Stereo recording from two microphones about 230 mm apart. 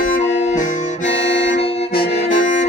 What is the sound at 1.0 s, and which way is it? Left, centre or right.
Accordion, left.